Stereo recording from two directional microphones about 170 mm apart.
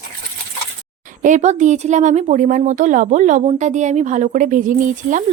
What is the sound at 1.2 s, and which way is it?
A woman's voice, 45° right (ahead or behind).